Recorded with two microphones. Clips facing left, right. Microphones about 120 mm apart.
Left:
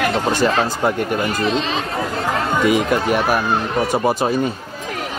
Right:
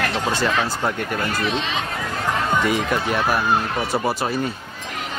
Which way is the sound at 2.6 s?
15° left (ahead or behind).